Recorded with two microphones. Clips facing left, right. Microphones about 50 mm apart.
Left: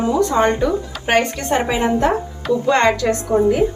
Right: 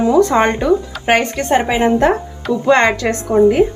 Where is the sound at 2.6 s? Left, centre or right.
Right.